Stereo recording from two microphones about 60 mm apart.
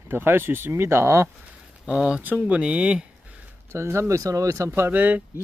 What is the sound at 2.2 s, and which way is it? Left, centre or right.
Speech, right.